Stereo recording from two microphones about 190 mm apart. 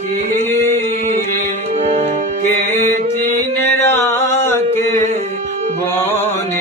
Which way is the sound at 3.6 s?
10° left (ahead or behind).